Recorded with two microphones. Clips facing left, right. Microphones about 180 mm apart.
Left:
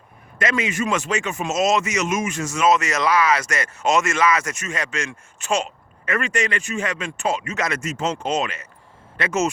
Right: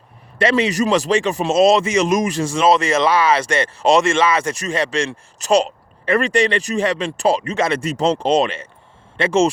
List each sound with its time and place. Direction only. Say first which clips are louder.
0.3 s speech: right 6 dB; 35° right (ahead or behind)